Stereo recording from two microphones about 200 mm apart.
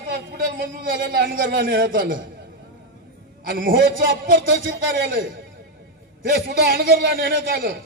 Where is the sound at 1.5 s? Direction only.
45° right (ahead or behind).